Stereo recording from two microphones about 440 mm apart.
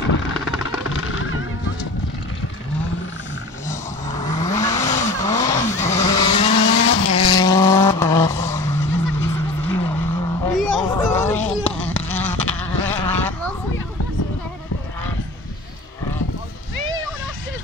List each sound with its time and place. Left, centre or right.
0.8 s a sound: left
3.6 s vehicle: centre
6.9 s vehicle: left
7.2 s vehicle: centre